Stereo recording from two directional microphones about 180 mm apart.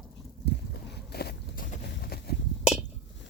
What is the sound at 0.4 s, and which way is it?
Boat, 70° left (ahead or behind).